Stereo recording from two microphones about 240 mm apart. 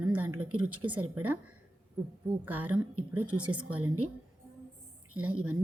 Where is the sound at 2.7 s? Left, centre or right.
Right.